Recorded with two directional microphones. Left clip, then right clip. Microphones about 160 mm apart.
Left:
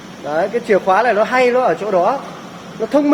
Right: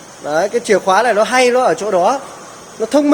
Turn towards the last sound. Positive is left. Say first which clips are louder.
# right 2 dB
turn(degrees=-30)  # may be behind; listen again after turning